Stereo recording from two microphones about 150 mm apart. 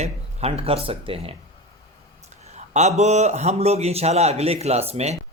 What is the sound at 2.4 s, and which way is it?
A man's voice, 50° right (ahead or behind).